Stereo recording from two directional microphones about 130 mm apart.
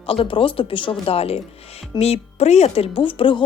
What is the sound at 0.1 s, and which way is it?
Speech, 45° left (ahead or behind).